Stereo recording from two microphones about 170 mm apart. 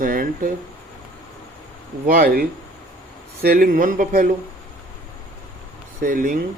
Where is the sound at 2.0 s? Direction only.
60° right (ahead or behind).